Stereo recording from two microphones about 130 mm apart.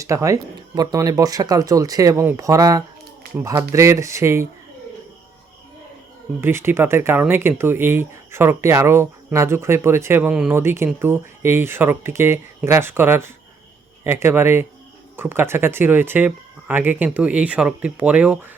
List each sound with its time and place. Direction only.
0.0 s speech: 25° right (ahead or behind)
6.4 s speech: 20° right (ahead or behind)
10.5 s speech: 20° right (ahead or behind)